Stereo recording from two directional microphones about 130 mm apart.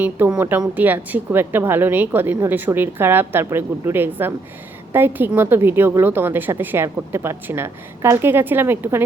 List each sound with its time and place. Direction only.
0.0 s a woman's voice: 10° right (ahead or behind)